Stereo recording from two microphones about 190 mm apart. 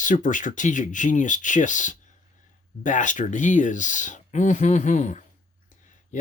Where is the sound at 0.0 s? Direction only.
40° left (ahead or behind).